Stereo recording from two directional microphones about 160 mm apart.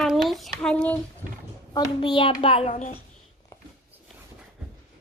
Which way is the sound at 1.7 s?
30° left (ahead or behind).